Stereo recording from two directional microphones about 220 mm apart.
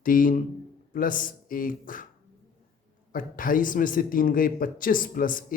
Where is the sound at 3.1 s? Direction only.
40° left (ahead or behind).